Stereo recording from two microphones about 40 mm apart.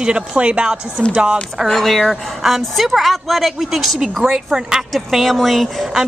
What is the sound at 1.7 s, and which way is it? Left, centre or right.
A woman's voice, centre.